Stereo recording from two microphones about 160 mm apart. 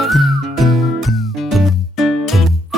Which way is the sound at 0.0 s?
Centre (ahead or behind).